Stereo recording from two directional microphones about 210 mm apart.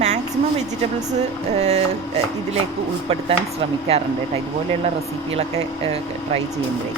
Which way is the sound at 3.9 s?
30° right (ahead or behind).